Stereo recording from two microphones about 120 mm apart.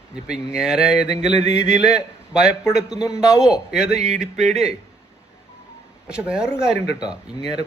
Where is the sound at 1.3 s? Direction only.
70° right (ahead or behind).